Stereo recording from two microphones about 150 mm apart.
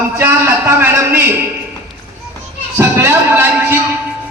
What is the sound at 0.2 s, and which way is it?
A man's voice, 15° right (ahead or behind).